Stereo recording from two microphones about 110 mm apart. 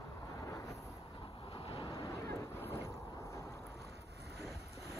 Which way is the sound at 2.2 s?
25° left (ahead or behind).